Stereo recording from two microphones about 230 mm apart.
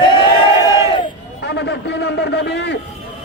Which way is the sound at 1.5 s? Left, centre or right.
Left.